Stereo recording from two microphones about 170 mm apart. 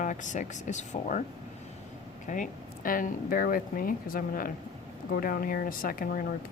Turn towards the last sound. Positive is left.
turn(degrees=55)  # may be behind; listen again after turning